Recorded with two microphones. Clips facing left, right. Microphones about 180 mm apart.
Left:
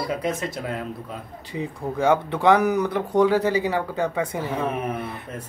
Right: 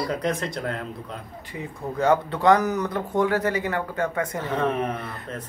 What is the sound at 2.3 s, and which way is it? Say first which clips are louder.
Speech: left 1 dB; 10° left (ahead or behind).